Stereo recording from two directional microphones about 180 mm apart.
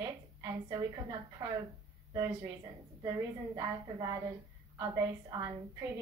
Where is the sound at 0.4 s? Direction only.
20° right (ahead or behind).